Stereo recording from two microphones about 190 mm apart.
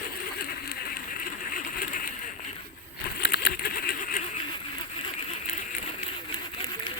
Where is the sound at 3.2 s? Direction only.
55° left (ahead or behind).